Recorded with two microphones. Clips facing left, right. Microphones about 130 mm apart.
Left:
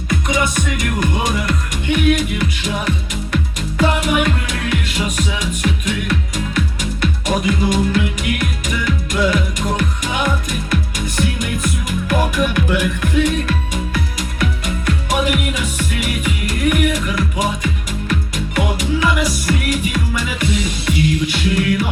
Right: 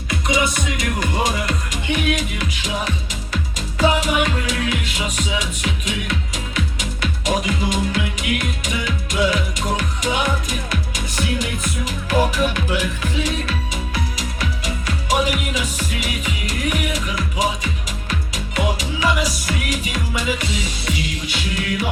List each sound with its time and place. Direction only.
0.1 s speech: 50° left (ahead or behind)
3.8 s music: 50° left (ahead or behind)
12.5 s speech: 60° left (ahead or behind)
13.9 s music: 55° left (ahead or behind)